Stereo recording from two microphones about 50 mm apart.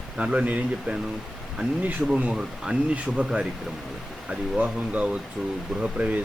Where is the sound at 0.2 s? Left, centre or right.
Right.